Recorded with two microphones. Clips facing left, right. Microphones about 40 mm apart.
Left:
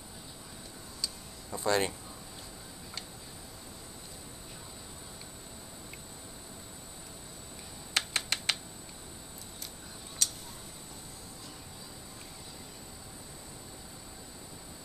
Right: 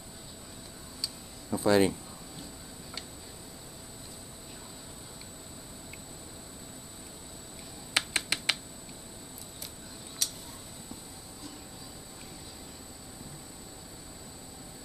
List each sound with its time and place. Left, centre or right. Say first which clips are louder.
1.0 s tick-tock: even; centre
7.9 s computer keyboard: right 2 dB; centre
10.2 s tick-tock: left 1 dB; centre